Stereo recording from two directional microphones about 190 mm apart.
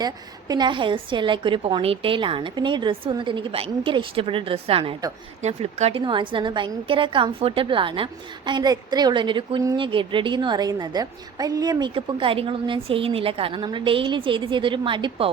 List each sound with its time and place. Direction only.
0.0 s a woman's voice: 20° right (ahead or behind)